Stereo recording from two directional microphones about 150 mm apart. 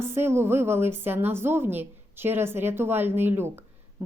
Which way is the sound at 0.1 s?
15° right (ahead or behind).